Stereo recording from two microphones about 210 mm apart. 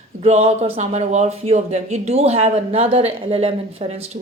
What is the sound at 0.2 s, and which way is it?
Speech, 30° right (ahead or behind).